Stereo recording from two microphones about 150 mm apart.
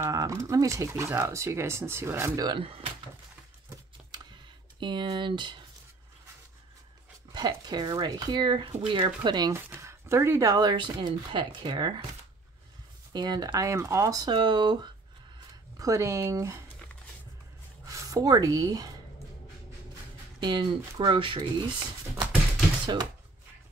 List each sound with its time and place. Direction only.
0.0 s speech: 20° right (ahead or behind)
2.4 s speech: 35° right (ahead or behind)
4.1 s computer keyboard: 30° right (ahead or behind)
7.3 s speech: 25° right (ahead or behind)
9.6 s speech: 15° right (ahead or behind); by 11.9 s 30° right (ahead or behind)
13.1 s speech: 30° right (ahead or behind)
15.8 s speech: 20° right (ahead or behind)
17.8 s a woman's voice: 25° right (ahead or behind)
20.3 s speech: 35° right (ahead or behind)